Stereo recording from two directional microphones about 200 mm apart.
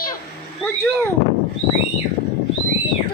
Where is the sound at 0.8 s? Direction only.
10° left (ahead or behind).